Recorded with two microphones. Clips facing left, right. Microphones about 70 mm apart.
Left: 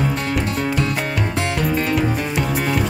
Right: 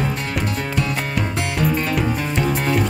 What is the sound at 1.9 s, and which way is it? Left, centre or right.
Music, centre.